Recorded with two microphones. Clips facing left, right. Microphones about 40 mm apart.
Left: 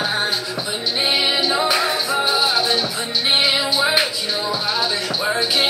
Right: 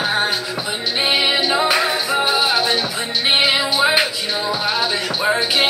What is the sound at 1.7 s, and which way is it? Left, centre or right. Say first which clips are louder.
Music: right 1 dB; right.